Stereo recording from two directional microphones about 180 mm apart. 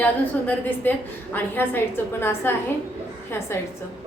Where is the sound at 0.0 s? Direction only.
10° left (ahead or behind).